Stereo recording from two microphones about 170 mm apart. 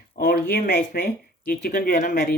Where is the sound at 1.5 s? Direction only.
55° left (ahead or behind).